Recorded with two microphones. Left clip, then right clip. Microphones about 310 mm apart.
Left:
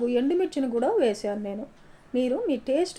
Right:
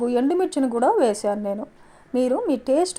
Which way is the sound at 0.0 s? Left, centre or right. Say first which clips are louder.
Right 3 dB; right.